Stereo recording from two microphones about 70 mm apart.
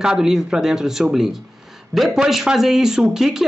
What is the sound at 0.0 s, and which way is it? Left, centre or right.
Speech, centre.